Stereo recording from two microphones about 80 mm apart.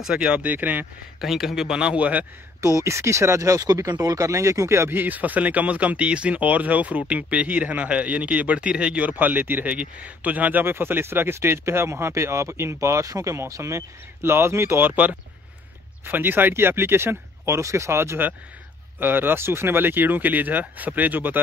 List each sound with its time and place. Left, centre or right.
0.0 s a man's voice: centre
1.2 s speech: centre
2.6 s a man's voice: right